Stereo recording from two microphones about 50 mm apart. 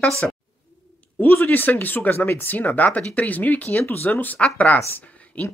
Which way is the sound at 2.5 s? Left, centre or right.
Left.